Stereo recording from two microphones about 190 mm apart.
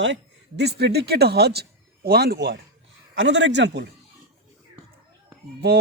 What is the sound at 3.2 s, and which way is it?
Speech, 70° right (ahead or behind).